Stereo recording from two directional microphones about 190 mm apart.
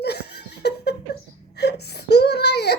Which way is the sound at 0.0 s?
60° left (ahead or behind).